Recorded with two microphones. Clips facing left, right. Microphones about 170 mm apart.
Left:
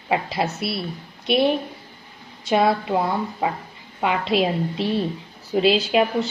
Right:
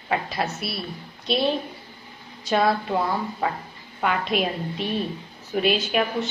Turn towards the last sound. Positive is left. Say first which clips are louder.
# left 4 dB
turn(degrees=25)  # may be behind; listen again after turning